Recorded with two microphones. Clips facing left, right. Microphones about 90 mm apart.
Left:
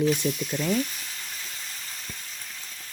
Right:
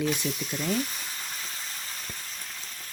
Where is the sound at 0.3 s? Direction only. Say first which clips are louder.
Left 5 dB; 40° left (ahead or behind).